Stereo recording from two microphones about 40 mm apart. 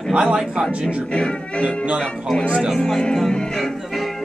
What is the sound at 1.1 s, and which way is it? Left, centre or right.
Music, left.